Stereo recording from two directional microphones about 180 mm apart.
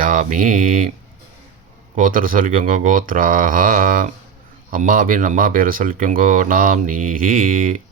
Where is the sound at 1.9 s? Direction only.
50° right (ahead or behind).